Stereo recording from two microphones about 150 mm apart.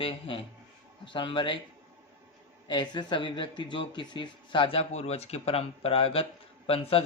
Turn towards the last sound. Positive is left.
turn(degrees=40)  # may be behind; listen again after turning